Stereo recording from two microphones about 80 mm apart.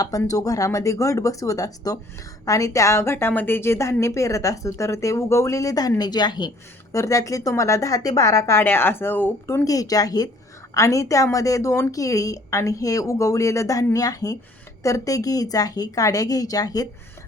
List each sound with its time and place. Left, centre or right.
0.3 s a woman's voice: left
6.0 s a woman's voice: left
6.9 s speech: left
9.6 s a woman's voice: left